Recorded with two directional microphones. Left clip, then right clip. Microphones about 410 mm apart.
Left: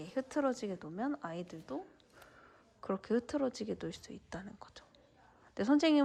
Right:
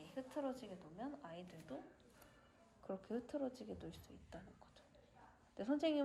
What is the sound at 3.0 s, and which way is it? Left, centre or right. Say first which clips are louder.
A woman's voice: left 11 dB; centre.